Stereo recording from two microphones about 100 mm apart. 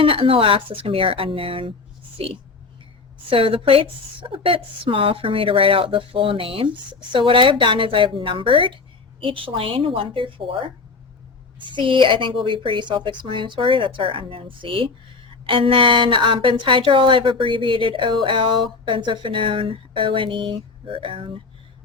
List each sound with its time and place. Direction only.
0.0 s a woman's voice: 70° right (ahead or behind)
3.2 s a woman's voice: 65° right (ahead or behind)
11.7 s a woman's voice: 55° right (ahead or behind)